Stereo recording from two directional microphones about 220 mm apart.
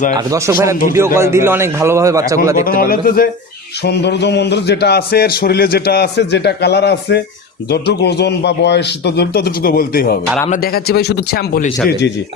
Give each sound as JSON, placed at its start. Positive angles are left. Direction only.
{"t": 0.1, "sound": "a man's voice", "side_deg": -15}
{"t": 2.6, "sound": "a man's voice", "side_deg": 40}